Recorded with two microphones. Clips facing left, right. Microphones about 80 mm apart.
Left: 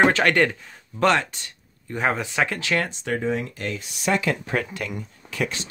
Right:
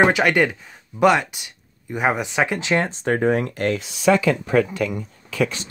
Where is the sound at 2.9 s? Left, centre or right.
Right.